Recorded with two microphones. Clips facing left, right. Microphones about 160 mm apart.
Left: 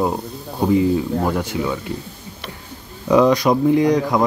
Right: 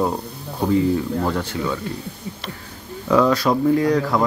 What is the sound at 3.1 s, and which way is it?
Speech, 15° left (ahead or behind).